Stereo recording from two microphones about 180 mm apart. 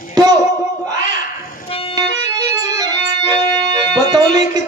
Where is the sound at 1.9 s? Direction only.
20° right (ahead or behind).